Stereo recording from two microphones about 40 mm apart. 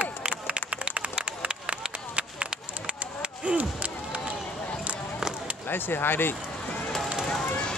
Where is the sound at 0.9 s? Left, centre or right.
Right.